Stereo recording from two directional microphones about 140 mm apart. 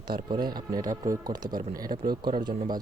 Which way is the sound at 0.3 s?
30° right (ahead or behind).